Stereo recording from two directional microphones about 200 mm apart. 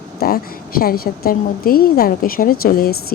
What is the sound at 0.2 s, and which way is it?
A woman's voice, 50° left (ahead or behind).